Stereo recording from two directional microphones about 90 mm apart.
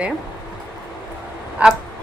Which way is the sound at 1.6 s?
15° right (ahead or behind).